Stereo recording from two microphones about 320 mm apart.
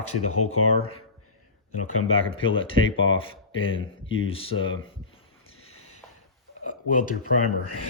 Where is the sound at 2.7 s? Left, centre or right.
Left.